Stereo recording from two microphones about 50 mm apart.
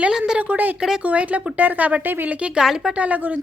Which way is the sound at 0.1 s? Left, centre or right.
Centre.